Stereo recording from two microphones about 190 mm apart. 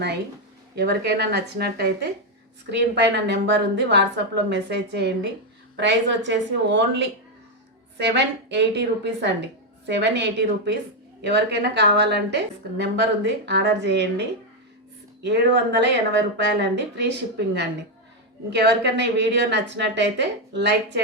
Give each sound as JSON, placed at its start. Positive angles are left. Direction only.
{"t": 0.8, "sound": "a woman's voice", "side_deg": -60}